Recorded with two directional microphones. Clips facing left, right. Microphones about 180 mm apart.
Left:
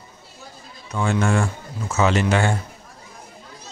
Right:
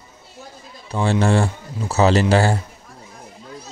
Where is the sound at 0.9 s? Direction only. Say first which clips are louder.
Right 3 dB; 35° right (ahead or behind).